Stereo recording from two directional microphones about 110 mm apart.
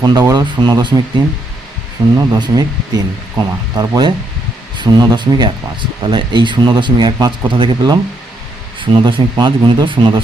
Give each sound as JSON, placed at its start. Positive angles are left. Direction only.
{"t": 0.0, "sound": "speech", "side_deg": -35}
{"t": 2.1, "sound": "speech", "side_deg": -35}